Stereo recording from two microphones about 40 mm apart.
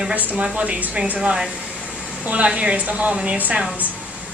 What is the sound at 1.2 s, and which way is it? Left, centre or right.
A woman's voice, right.